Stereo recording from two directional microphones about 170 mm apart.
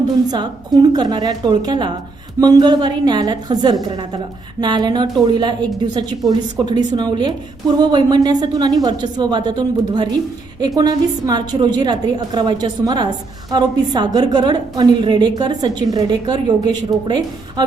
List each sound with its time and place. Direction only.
0.3 s a woman's voice: 25° right (ahead or behind)